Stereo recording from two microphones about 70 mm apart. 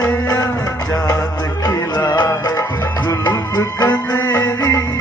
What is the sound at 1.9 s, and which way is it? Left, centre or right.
Music, left.